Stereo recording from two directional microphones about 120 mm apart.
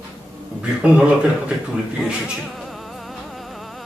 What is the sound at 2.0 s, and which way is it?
Speech, 5° right (ahead or behind).